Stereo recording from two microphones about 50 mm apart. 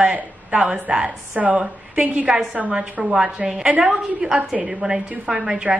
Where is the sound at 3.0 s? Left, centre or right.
Centre.